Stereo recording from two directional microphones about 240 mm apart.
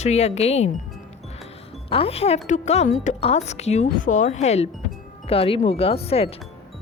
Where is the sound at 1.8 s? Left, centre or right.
Left.